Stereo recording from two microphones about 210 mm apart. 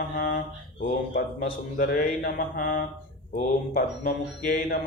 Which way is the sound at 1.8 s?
40° left (ahead or behind).